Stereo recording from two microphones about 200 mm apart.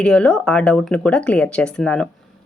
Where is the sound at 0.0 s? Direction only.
5° left (ahead or behind).